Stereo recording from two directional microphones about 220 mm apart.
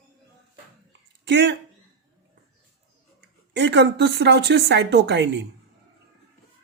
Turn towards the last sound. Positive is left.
turn(degrees=-50)  # may be behind; listen again after turning